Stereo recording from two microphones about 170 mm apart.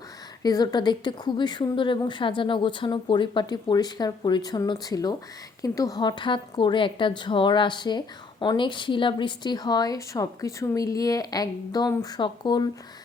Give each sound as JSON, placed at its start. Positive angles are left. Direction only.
{"t": 0.4, "sound": "a woman's voice", "side_deg": 25}